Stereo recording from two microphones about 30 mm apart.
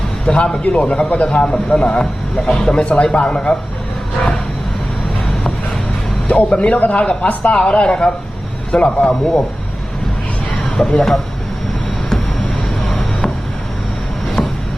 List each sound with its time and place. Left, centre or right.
0.3 s a man's voice: left
0.6 s a man's voice: left
6.2 s speech: left
6.9 s a man's voice: left
10.7 s speech: centre